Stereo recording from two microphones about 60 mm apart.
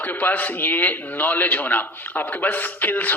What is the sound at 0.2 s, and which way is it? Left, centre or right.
A man's voice, left.